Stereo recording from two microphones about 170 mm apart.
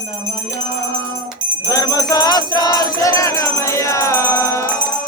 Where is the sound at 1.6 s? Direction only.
25° left (ahead or behind).